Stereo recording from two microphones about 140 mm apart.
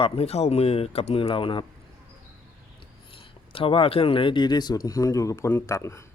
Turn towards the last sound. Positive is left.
turn(degrees=20)  # may be behind; listen again after turning